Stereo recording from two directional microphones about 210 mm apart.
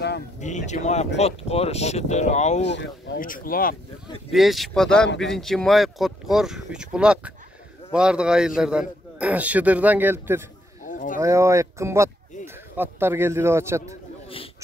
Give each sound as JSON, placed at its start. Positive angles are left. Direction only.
{"t": 0.4, "sound": "speech", "side_deg": 35}
{"t": 2.6, "sound": "speech", "side_deg": 60}
{"t": 3.2, "sound": "speech", "side_deg": 40}
{"t": 4.3, "sound": "a man's voice", "side_deg": 0}
{"t": 10.9, "sound": "a sound", "side_deg": 40}
{"t": 11.1, "sound": "a man's voice", "side_deg": -15}
{"t": 13.8, "sound": "a sound", "side_deg": 25}